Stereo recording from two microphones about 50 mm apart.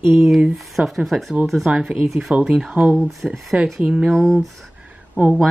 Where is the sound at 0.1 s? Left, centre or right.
Centre.